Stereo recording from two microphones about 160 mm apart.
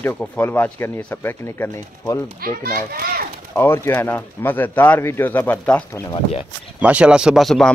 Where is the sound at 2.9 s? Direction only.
70° right (ahead or behind).